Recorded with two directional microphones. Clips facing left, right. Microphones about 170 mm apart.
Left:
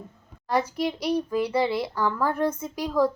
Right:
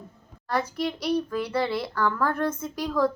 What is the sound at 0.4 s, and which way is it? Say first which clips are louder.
A child's voice: left 2 dB; 15° left (ahead or behind).